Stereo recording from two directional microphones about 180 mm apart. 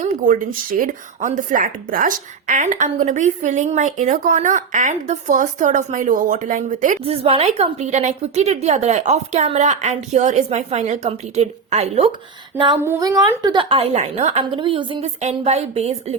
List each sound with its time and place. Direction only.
0.0 s speech: 50° right (ahead or behind)
7.0 s a woman's voice: 35° right (ahead or behind)
12.8 s a woman's voice: 15° right (ahead or behind); by 16.1 s 35° right (ahead or behind)